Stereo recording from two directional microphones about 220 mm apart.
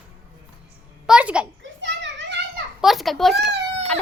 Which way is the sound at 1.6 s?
55° right (ahead or behind).